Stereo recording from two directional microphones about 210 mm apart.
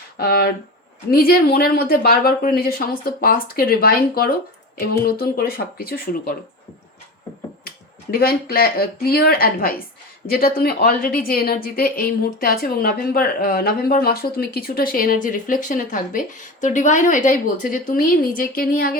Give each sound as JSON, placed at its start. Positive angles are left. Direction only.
{"t": 0.2, "sound": "a woman's voice", "side_deg": 50}
{"t": 8.1, "sound": "a woman's voice", "side_deg": 45}